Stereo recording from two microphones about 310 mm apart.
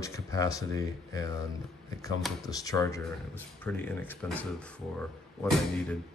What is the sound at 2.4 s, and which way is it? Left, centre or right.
Speech, centre.